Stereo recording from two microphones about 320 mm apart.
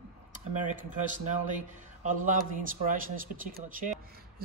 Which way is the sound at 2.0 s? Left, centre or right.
Right.